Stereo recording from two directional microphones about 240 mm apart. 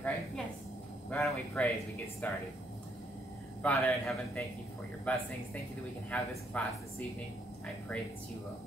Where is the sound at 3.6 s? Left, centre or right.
Centre.